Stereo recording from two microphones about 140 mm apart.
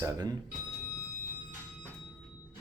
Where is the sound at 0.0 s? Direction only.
30° right (ahead or behind).